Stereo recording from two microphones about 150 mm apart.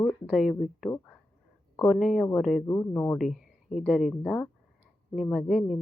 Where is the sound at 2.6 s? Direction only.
20° left (ahead or behind).